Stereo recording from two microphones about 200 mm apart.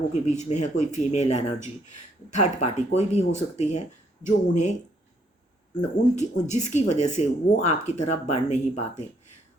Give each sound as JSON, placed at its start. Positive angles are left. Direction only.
{"t": 0.1, "sound": "speech", "side_deg": 35}
{"t": 6.1, "sound": "speech", "side_deg": 35}